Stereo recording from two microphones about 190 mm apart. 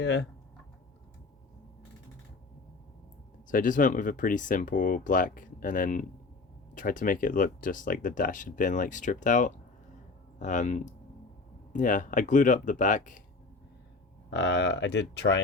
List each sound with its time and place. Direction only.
0.0 s speech: 70° left (ahead or behind)
3.5 s speech: 45° left (ahead or behind)
14.3 s speech: 70° left (ahead or behind)